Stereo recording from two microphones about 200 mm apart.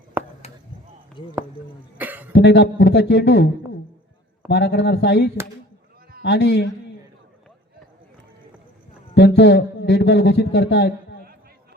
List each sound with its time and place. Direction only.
0.4 s a sound: 30° left (ahead or behind)
1.2 s speech: 25° left (ahead or behind)
2.0 s cough: 10° right (ahead or behind)
2.3 s speech: 55° left (ahead or behind)
9.1 s speech: 60° left (ahead or behind)